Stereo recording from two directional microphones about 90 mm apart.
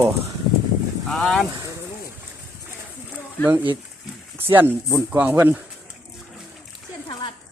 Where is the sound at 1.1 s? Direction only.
5° left (ahead or behind).